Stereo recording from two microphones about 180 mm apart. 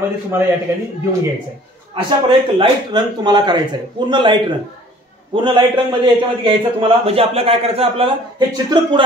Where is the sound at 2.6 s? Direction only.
25° right (ahead or behind).